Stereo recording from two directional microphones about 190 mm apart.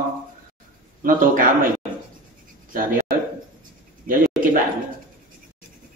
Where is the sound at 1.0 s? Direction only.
45° right (ahead or behind).